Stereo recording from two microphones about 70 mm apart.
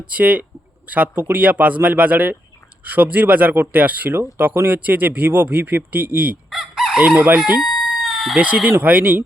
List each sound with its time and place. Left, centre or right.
0.1 s speech: right
6.5 s crowing: centre
7.0 s chicken: centre
7.6 s chicken: centre
8.4 s speech: centre